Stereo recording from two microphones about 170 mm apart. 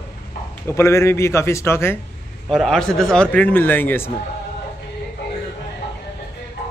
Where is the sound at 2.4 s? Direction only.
Centre (ahead or behind).